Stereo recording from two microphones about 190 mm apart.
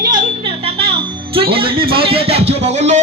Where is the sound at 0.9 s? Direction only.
30° right (ahead or behind).